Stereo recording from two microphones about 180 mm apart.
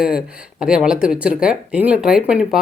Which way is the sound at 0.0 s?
5° right (ahead or behind).